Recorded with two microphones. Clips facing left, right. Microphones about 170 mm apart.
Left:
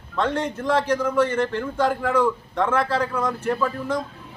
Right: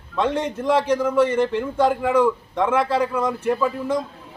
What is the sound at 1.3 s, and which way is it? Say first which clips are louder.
Speech: right 3 dB; 20° right (ahead or behind).